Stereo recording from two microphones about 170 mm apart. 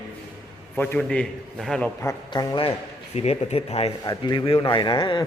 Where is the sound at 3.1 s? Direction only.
40° left (ahead or behind).